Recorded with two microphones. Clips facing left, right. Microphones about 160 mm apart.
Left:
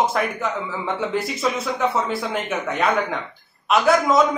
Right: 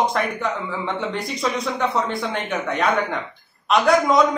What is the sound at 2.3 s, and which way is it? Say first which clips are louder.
Speech: even; centre (ahead or behind).